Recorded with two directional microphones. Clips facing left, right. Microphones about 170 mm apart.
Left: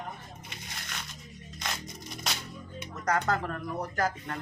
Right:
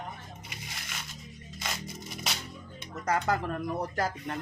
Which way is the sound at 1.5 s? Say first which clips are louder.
Even; 5° right (ahead or behind).